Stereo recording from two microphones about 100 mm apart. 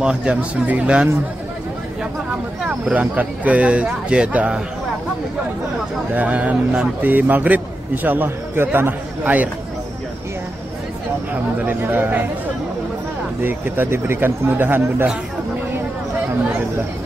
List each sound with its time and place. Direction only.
0.0 s a man's voice: 10° right (ahead or behind)
2.7 s a man's voice: 15° right (ahead or behind)
6.1 s a man's voice: 15° right (ahead or behind)
11.6 s speech: 20° right (ahead or behind)
13.4 s speech: 20° right (ahead or behind)